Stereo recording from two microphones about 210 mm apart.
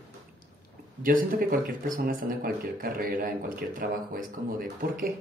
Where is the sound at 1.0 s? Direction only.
45° right (ahead or behind).